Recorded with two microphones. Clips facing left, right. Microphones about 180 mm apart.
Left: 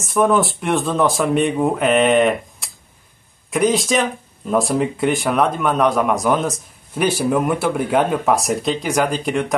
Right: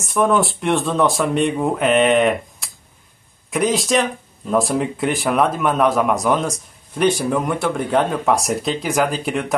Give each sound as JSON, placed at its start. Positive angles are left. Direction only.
{"t": 0.0, "sound": "speech", "side_deg": 0}